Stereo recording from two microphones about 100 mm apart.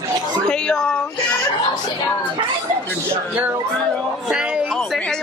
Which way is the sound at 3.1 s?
25° right (ahead or behind).